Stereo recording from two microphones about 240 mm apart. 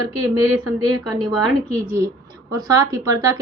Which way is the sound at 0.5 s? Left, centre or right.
Right.